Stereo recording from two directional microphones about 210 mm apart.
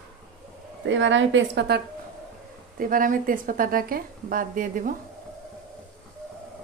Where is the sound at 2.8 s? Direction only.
40° right (ahead or behind).